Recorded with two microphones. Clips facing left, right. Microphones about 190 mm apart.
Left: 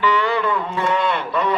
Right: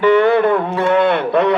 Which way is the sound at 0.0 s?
55° right (ahead or behind).